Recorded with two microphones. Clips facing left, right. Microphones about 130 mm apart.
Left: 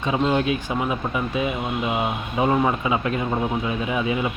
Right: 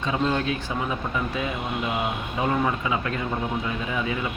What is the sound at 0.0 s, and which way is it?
Speech, 15° left (ahead or behind).